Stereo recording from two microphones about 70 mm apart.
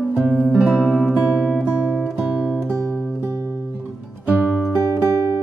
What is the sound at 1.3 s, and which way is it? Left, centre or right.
Guitar, centre.